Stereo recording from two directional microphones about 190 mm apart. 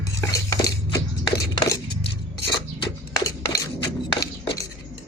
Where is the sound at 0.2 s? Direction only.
20° left (ahead or behind).